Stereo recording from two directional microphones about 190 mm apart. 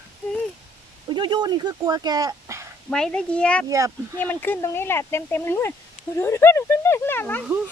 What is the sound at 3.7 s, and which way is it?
Speech, 15° right (ahead or behind).